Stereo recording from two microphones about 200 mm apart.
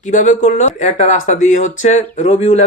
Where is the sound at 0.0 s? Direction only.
40° left (ahead or behind).